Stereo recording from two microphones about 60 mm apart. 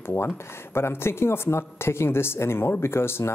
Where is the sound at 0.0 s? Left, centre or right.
Left.